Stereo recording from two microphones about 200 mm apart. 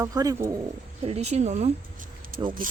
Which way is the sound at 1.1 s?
35° right (ahead or behind).